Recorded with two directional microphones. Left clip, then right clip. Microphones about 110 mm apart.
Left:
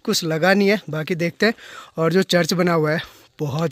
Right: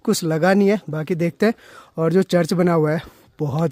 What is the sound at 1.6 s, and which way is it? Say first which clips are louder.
Speech: left 1 dB; 15° right (ahead or behind).